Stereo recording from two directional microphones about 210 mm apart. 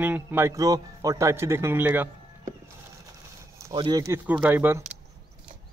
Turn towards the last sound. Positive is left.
turn(degrees=-10)  # may be behind; listen again after turning